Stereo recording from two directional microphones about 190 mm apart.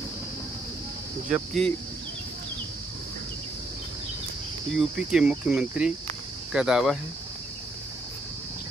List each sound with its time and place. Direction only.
1.3 s cricket: centre (ahead or behind)
4.7 s cricket: 5° right (ahead or behind)